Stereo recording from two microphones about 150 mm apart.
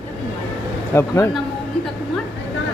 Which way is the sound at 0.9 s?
20° left (ahead or behind).